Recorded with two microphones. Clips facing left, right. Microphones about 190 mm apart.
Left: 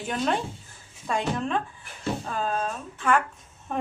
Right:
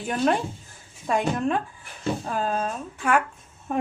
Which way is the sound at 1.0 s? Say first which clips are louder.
Right 4 dB; 10° right (ahead or behind).